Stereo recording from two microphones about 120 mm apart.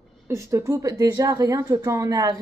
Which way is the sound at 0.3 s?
25° right (ahead or behind).